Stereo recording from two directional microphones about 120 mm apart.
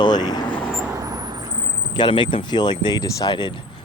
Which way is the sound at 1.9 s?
40° left (ahead or behind).